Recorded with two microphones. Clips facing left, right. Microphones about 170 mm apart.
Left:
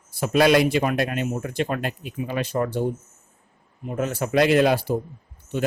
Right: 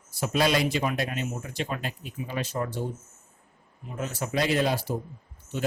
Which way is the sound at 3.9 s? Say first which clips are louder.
Left 7 dB; 60° left (ahead or behind).